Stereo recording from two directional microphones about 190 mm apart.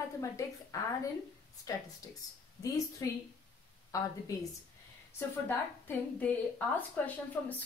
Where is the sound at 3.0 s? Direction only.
15° left (ahead or behind).